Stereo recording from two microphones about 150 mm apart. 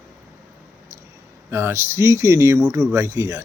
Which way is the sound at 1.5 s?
15° right (ahead or behind).